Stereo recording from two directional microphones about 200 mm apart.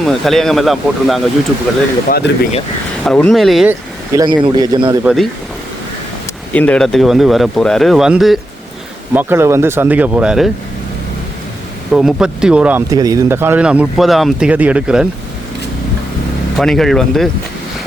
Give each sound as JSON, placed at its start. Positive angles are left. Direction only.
{"t": 0.0, "sound": "speech", "side_deg": 0}
{"t": 2.0, "sound": "speech", "side_deg": 50}
{"t": 3.0, "sound": "speech", "side_deg": 5}
{"t": 4.1, "sound": "speech", "side_deg": -20}
{"t": 5.0, "sound": "speech", "side_deg": 0}
{"t": 6.5, "sound": "speech", "side_deg": 5}
{"t": 11.9, "sound": "speech", "side_deg": -5}
{"t": 12.9, "sound": "speech", "side_deg": -15}
{"t": 16.6, "sound": "speech", "side_deg": 0}